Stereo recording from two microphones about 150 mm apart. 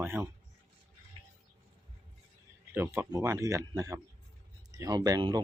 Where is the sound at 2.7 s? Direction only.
15° right (ahead or behind).